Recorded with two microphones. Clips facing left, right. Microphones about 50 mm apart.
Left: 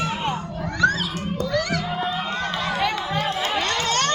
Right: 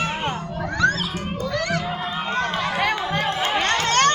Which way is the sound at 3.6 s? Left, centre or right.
Right.